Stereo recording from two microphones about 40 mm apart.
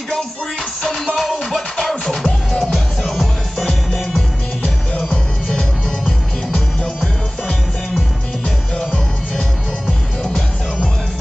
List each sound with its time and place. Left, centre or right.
0.8 s music: centre
4.9 s music: left
7.0 s music: centre
8.7 s music: left